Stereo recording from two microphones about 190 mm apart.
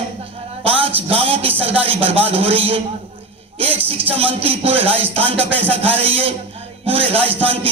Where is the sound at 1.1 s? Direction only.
30° right (ahead or behind).